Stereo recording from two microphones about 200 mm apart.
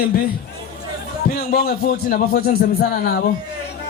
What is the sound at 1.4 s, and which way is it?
A man's voice, 50° left (ahead or behind).